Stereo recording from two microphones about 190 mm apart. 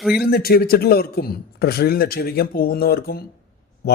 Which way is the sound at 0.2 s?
55° left (ahead or behind).